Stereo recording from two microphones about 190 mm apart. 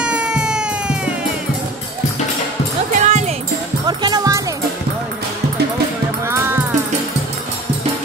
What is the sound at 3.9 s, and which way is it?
Music, 20° right (ahead or behind).